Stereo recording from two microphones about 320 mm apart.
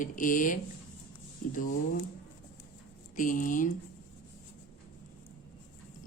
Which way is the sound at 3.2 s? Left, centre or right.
Left.